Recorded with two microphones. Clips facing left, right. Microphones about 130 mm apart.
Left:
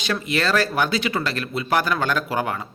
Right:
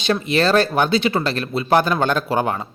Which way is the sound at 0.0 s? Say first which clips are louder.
Right 5 dB; 25° right (ahead or behind).